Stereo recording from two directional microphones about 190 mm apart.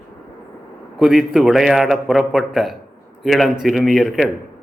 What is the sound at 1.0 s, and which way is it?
A man's voice, centre (ahead or behind).